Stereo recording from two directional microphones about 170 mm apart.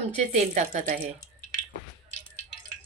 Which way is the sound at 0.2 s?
45° right (ahead or behind).